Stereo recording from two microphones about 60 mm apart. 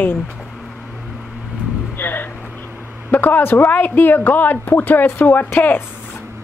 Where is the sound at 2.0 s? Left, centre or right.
Left.